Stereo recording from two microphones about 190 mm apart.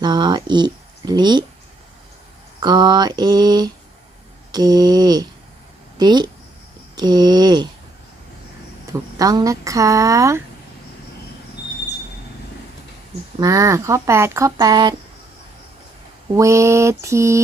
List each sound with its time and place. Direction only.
0.0 s speech: 20° right (ahead or behind)
2.6 s a sound: 20° right (ahead or behind)
6.0 s speech: 20° right (ahead or behind)
6.9 s a sound: 20° right (ahead or behind)
8.9 s speech: 20° right (ahead or behind)
13.4 s speech: 15° right (ahead or behind)
16.3 s speech: 15° right (ahead or behind)